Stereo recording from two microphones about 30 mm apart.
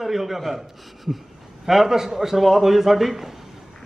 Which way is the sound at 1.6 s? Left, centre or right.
Centre.